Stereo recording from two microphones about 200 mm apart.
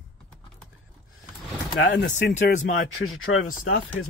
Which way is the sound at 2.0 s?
40° left (ahead or behind).